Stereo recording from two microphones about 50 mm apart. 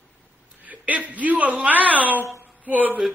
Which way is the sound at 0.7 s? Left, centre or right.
Right.